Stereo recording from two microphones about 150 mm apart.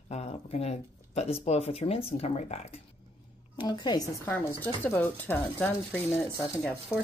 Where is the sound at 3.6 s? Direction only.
30° left (ahead or behind).